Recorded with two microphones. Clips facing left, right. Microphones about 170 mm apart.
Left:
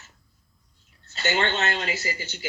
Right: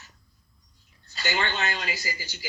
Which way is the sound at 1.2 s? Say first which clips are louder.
Left 4 dB; 25° left (ahead or behind).